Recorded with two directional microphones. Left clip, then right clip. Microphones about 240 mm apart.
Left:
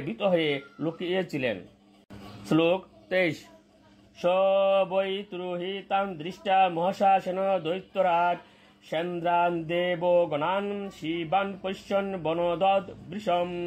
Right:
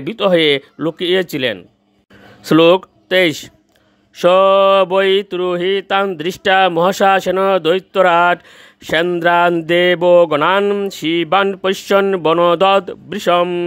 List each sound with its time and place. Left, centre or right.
0.0 s speech: right
2.4 s mantra: right
3.1 s speech: right
4.2 s mantra: right